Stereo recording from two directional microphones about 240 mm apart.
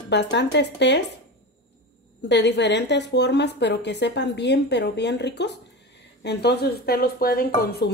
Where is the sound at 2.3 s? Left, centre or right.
Left.